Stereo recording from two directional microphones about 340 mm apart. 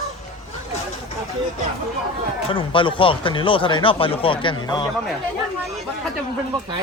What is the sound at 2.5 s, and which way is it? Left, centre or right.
Speech, centre.